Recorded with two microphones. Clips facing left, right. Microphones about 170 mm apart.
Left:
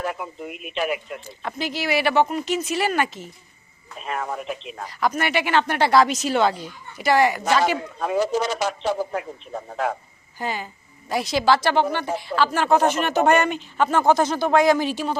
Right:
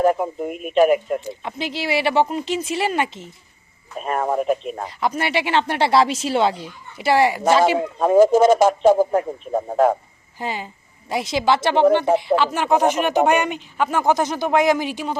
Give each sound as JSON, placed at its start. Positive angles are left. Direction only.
{"t": 0.0, "sound": "speech", "side_deg": -45}
{"t": 1.2, "sound": "speech", "side_deg": -20}
{"t": 3.9, "sound": "speech", "side_deg": -45}
{"t": 4.8, "sound": "speech", "side_deg": -25}
{"t": 7.9, "sound": "speech", "side_deg": -45}
{"t": 9.9, "sound": "a sound", "side_deg": -25}
{"t": 11.1, "sound": "speech", "side_deg": -20}